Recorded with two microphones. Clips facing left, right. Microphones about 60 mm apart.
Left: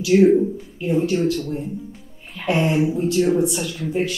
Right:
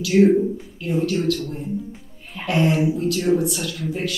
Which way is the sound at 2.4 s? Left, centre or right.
Left.